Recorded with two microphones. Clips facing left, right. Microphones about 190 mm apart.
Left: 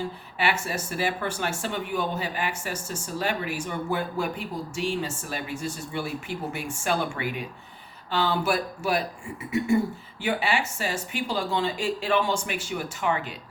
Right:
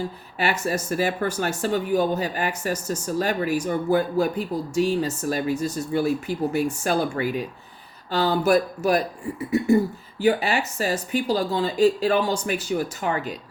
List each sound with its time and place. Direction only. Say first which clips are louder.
0.3 s speech: right 4 dB; 40° right (ahead or behind)
10.2 s speech: right 6 dB; 40° right (ahead or behind)